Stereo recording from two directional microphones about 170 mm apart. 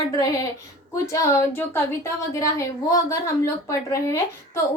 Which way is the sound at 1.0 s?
15° left (ahead or behind).